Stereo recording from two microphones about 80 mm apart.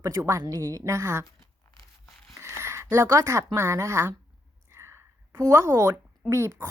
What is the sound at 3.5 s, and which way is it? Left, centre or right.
Speech, right.